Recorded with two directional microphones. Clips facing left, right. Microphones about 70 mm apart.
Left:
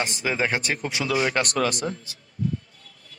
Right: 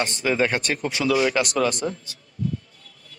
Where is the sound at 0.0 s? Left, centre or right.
Centre.